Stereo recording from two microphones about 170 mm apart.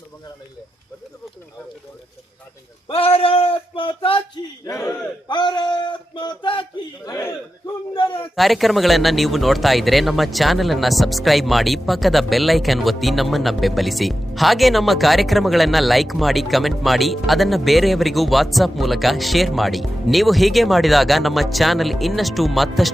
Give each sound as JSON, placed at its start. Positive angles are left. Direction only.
{"t": 2.8, "sound": "speech", "side_deg": 35}
{"t": 4.6, "sound": "speech", "side_deg": 20}
{"t": 7.9, "sound": "speech", "side_deg": 30}
{"t": 8.4, "sound": "speech", "side_deg": 0}